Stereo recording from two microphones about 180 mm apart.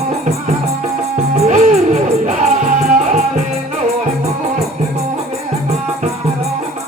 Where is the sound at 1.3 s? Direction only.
40° right (ahead or behind).